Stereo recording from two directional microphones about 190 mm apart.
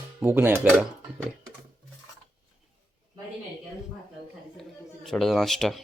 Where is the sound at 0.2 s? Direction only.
10° right (ahead or behind).